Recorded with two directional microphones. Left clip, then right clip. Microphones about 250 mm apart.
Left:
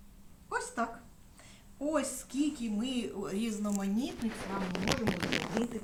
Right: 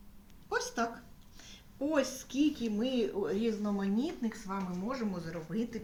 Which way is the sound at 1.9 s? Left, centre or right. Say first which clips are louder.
Right 1 dB; left.